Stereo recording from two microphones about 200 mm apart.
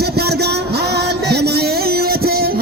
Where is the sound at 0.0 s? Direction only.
55° right (ahead or behind).